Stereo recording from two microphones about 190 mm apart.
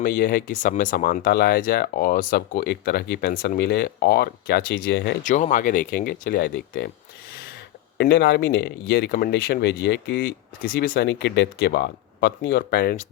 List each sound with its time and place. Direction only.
0.0 s speech: 50° left (ahead or behind)
5.2 s speech: 40° left (ahead or behind); by 6.9 s 60° left (ahead or behind)
7.9 s speech: 65° left (ahead or behind)